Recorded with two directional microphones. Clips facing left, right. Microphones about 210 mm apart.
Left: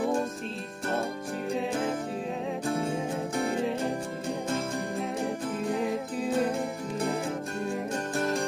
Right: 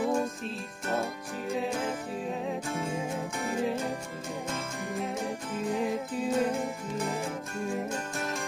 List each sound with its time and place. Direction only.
1.5 s music: centre (ahead or behind)
2.7 s music: 30° left (ahead or behind)
4.9 s music: centre (ahead or behind)